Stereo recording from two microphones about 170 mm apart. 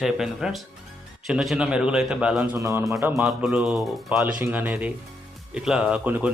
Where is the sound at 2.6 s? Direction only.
15° right (ahead or behind).